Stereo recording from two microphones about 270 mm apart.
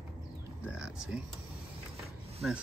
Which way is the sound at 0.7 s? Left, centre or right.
Centre.